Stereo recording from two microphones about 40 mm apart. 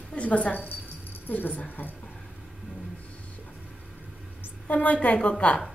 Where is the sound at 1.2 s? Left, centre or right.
Left.